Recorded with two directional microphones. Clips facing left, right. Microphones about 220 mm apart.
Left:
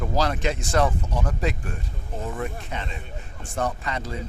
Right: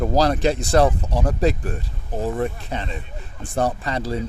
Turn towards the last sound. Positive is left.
turn(degrees=-35)  # may be behind; listen again after turning